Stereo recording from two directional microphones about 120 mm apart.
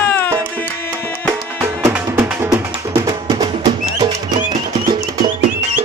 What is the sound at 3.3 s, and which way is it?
Music, 35° right (ahead or behind).